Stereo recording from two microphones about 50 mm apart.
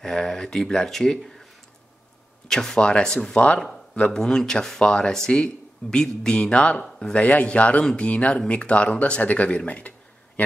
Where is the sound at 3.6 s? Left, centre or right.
Centre.